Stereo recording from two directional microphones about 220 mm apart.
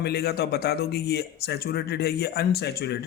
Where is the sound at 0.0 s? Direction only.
45° left (ahead or behind).